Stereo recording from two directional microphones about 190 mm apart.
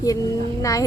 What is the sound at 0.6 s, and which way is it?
Speech, 15° left (ahead or behind).